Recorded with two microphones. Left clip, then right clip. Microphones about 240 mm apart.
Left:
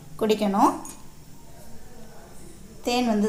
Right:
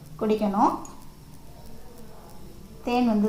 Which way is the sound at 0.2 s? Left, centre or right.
Left.